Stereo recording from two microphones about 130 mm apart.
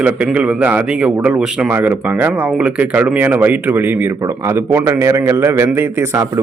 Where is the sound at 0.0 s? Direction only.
10° right (ahead or behind).